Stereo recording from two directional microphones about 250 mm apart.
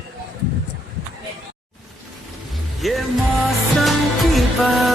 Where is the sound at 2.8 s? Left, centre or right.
Centre.